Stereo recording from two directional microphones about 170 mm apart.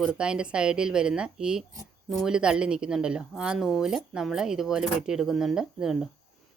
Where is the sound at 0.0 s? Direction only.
5° right (ahead or behind).